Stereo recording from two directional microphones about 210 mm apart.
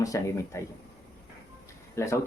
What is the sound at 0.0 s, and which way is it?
Speech, 15° left (ahead or behind).